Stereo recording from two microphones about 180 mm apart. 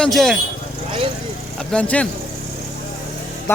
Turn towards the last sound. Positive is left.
turn(degrees=15)  # may be behind; listen again after turning